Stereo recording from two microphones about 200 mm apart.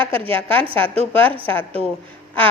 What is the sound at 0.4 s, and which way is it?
A woman's voice, 5° left (ahead or behind).